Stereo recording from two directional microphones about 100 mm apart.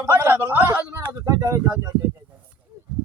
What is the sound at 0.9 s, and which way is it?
A child's voice, 35° right (ahead or behind).